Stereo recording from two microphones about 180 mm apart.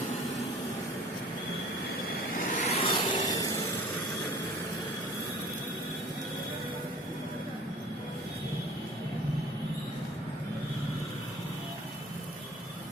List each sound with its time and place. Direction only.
2.3 s vehicle: 40° left (ahead or behind); by 3.4 s 25° left (ahead or behind)